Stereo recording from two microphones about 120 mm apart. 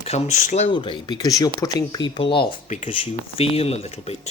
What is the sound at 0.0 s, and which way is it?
Speech, 65° left (ahead or behind).